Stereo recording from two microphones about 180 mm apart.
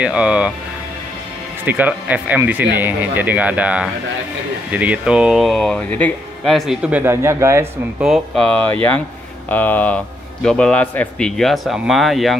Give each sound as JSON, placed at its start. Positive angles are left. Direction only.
{"t": 0.0, "sound": "speech", "side_deg": -5}
{"t": 1.7, "sound": "speech", "side_deg": -10}
{"t": 8.0, "sound": "speech", "side_deg": 0}